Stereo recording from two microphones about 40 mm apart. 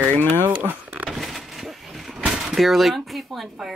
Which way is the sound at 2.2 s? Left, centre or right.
Centre.